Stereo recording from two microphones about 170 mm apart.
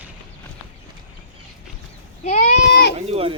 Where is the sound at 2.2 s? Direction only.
45° left (ahead or behind).